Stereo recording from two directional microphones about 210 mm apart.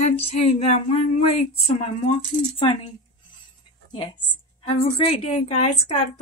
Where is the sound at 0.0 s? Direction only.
30° left (ahead or behind).